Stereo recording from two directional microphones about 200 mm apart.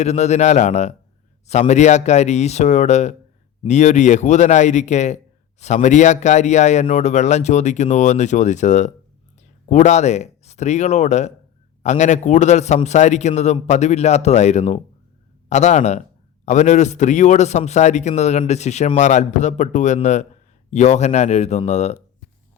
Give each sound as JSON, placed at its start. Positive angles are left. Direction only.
{"t": 0.0, "sound": "a man's voice", "side_deg": 35}